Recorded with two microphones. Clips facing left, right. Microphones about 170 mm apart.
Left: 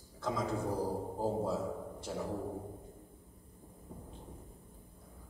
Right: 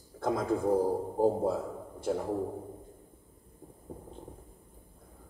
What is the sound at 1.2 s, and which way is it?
A man's voice, 55° right (ahead or behind).